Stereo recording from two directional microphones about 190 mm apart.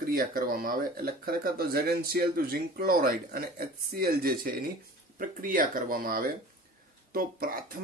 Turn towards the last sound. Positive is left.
turn(degrees=-50)  # may be behind; listen again after turning